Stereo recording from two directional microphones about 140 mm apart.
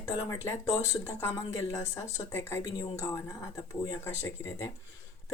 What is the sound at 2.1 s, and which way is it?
Speech, 20° left (ahead or behind).